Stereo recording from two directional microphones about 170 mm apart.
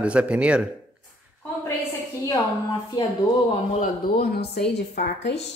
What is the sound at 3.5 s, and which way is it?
Speech, 35° left (ahead or behind).